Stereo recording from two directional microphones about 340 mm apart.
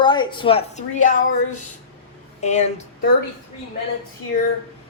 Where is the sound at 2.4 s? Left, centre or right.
Centre.